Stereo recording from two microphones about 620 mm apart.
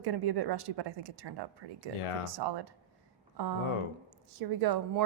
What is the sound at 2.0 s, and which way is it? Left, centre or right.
Speech, left.